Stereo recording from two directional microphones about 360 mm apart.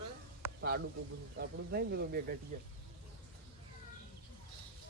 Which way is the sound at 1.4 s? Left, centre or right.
Right.